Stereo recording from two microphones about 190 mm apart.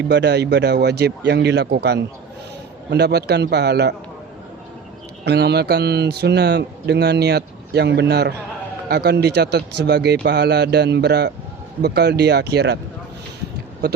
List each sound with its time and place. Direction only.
0.1 s speech: 60° right (ahead or behind)
5.2 s speech: 60° right (ahead or behind)
13.8 s speech: 60° right (ahead or behind)